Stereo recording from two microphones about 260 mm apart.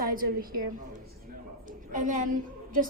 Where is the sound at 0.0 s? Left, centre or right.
Right.